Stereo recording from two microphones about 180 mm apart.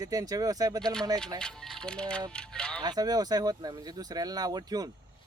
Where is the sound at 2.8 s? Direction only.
20° right (ahead or behind).